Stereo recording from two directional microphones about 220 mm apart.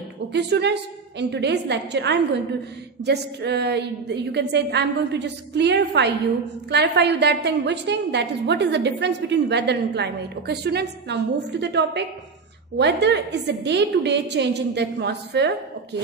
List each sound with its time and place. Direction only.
0.3 s a woman's voice: 50° right (ahead or behind)